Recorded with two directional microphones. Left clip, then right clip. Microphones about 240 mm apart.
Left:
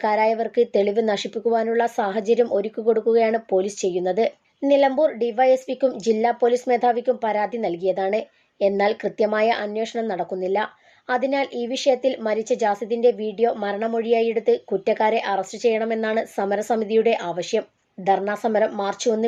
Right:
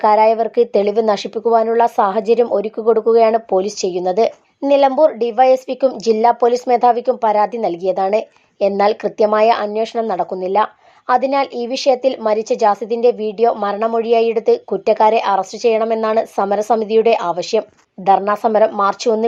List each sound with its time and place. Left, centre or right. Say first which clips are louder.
0.0 s speech: right 8 dB; centre